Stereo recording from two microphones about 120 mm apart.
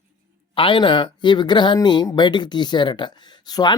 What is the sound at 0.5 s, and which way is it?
Speech, 45° left (ahead or behind).